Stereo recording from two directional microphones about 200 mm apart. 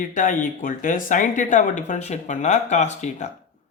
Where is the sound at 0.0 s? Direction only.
40° left (ahead or behind).